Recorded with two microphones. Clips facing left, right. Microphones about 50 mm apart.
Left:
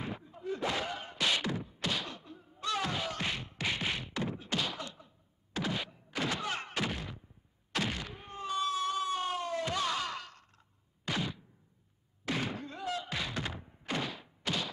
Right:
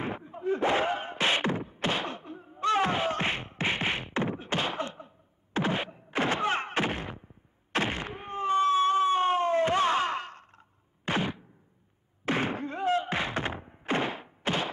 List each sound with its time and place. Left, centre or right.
0.0 s beatboxing: right
7.7 s a sound: right
12.3 s thunk: right